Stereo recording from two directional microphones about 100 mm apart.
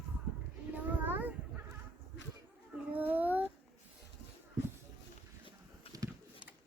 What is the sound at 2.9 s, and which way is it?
Child singing, 20° right (ahead or behind).